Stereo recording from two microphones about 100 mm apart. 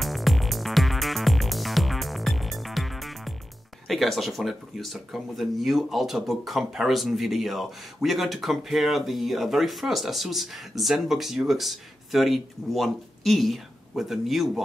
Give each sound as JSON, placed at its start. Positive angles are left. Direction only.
{"t": 0.0, "sound": "music", "side_deg": 0}
{"t": 3.8, "sound": "speech", "side_deg": 0}